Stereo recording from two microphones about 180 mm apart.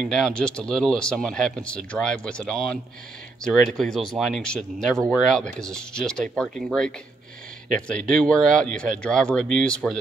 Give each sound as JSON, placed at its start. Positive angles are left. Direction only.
{"t": 0.0, "sound": "speech", "side_deg": 5}